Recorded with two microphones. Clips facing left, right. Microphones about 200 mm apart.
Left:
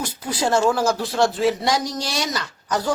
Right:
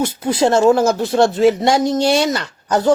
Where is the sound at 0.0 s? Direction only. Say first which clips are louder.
Right 8 dB; 25° right (ahead or behind).